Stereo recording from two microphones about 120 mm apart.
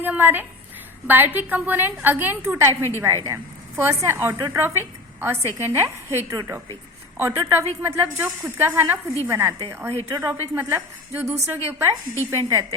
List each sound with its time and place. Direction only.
0.0 s a woman's voice: 15° right (ahead or behind)